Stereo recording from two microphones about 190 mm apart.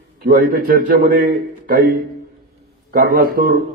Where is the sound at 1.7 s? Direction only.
45° right (ahead or behind).